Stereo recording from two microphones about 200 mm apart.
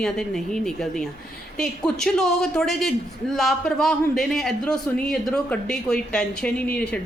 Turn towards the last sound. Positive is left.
turn(degrees=5)  # may be behind; listen again after turning